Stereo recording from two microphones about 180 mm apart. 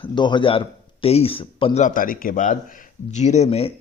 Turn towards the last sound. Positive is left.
turn(degrees=35)  # may be behind; listen again after turning